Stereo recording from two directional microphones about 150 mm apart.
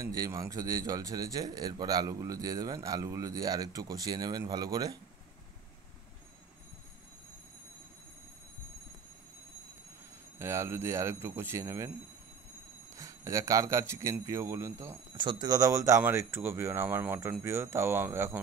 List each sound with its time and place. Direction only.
0.0 s speech: 25° right (ahead or behind)
10.4 s speech: 15° right (ahead or behind)
12.9 s speech: 20° right (ahead or behind)
15.1 s speech: 30° right (ahead or behind)